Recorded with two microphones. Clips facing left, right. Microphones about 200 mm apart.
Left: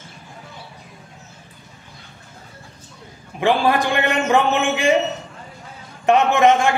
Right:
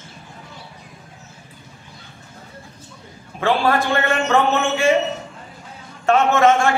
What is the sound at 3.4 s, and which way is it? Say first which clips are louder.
A man's voice: left 1 dB; 15° left (ahead or behind).